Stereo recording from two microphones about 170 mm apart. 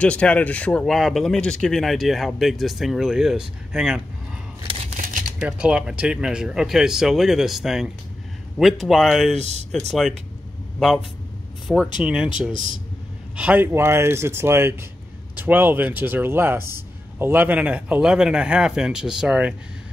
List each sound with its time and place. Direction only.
0.0 s speech: 5° left (ahead or behind)
4.6 s scissors: 35° right (ahead or behind)
5.4 s speech: 5° right (ahead or behind)
11.6 s speech: centre (ahead or behind)
13.4 s speech: 10° right (ahead or behind)